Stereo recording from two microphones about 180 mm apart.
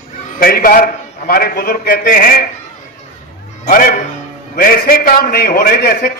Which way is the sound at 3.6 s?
50° left (ahead or behind).